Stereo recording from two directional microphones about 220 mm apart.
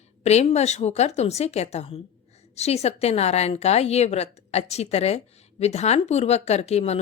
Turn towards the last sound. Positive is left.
turn(degrees=30)  # may be behind; listen again after turning